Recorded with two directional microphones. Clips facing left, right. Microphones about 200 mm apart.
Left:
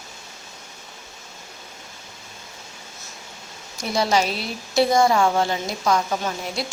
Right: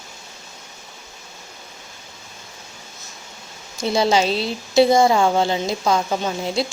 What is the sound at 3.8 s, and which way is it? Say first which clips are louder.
Speech: right 3 dB; 25° right (ahead or behind).